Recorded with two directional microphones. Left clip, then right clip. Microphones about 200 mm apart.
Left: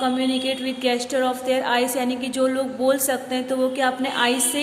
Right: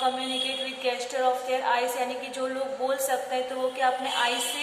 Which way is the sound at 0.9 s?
45° left (ahead or behind).